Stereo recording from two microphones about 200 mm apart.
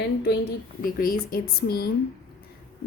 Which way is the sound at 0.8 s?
45° left (ahead or behind).